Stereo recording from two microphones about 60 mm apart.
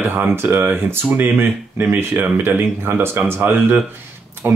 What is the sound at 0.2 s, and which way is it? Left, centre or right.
Speech, right.